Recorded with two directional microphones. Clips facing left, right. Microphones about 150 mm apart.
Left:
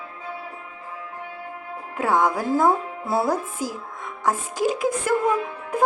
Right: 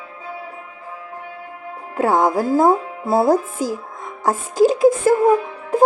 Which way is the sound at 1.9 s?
35° right (ahead or behind).